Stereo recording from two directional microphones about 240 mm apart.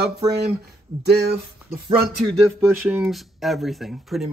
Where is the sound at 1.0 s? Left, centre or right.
Right.